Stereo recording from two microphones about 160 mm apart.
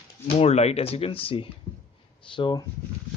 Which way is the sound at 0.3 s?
40° left (ahead or behind).